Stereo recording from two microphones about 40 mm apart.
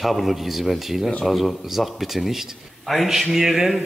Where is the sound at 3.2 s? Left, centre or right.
Centre.